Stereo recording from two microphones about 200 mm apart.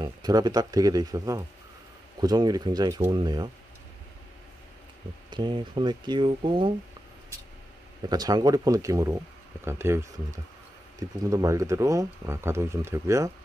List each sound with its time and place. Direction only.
0.0 s speech: 20° right (ahead or behind)
5.3 s speech: 20° right (ahead or behind)
8.1 s speech: 20° right (ahead or behind)